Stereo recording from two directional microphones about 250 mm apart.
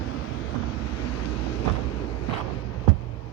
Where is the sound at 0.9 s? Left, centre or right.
Left.